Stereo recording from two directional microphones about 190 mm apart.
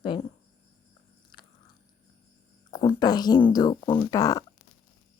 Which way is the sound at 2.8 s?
20° left (ahead or behind).